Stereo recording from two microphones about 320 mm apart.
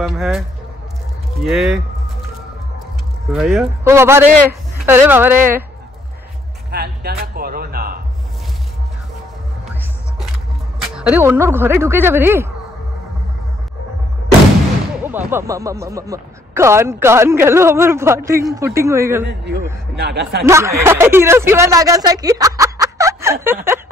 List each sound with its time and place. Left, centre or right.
0.0 s speech: centre
3.3 s speech: centre
6.7 s speech: right
11.0 s speech: centre
15.0 s speech: centre
19.2 s speech: right
20.4 s speech: centre